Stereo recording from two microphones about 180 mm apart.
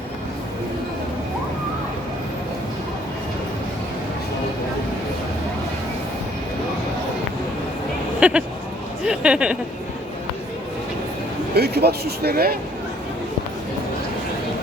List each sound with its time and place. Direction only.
8.2 s speech: 5° right (ahead or behind)
11.5 s speech: 65° right (ahead or behind)